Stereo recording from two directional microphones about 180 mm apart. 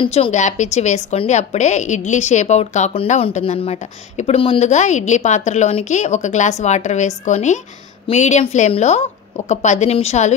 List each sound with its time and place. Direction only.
0.0 s a woman's voice: 35° left (ahead or behind)